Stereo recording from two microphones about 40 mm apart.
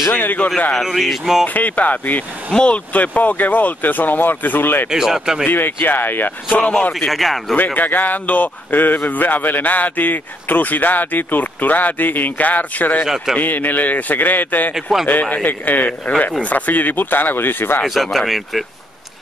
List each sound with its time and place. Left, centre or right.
0.1 s speech: left
0.8 s speech: centre
1.5 s speech: left
2.6 s speech: left
4.9 s speech: centre
5.5 s speech: left
7.1 s speech: centre
7.5 s speech: left
13.0 s speech: centre
13.4 s speech: left
15.0 s speech: left
17.8 s speech: centre